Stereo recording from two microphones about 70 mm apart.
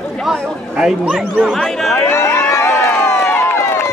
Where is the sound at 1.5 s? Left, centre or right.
Centre.